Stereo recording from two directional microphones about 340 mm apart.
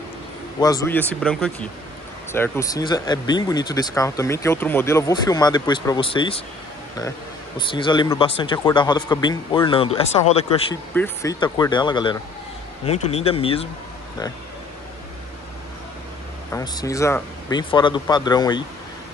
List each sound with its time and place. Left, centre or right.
0.6 s speech: centre
16.5 s speech: centre